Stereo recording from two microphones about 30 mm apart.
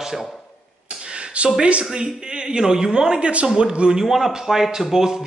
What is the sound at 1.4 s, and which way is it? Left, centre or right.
Speech, right.